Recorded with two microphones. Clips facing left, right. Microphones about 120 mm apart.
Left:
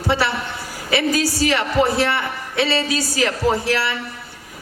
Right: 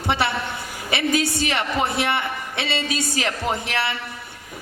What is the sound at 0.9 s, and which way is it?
Speech, 20° right (ahead or behind).